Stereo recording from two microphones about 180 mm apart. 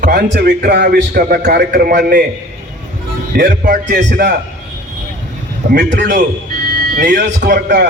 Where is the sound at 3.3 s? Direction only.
50° right (ahead or behind).